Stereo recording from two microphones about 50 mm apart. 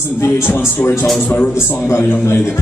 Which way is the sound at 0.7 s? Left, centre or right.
Left.